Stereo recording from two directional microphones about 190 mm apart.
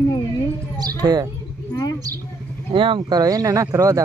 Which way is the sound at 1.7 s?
20° left (ahead or behind).